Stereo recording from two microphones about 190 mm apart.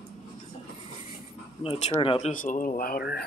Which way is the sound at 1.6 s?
30° left (ahead or behind).